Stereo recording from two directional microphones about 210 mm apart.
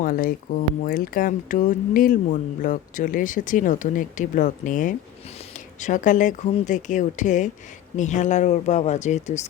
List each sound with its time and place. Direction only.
0.0 s speech: 40° left (ahead or behind)